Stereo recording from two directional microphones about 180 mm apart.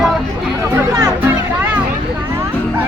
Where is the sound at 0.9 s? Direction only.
20° right (ahead or behind).